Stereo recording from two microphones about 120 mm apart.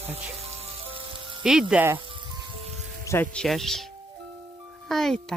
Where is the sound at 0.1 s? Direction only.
60° right (ahead or behind).